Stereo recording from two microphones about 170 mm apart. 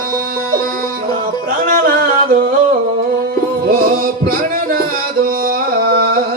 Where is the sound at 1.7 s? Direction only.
60° right (ahead or behind).